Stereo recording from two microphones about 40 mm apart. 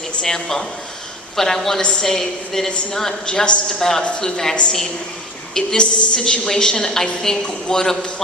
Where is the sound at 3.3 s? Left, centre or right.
Left.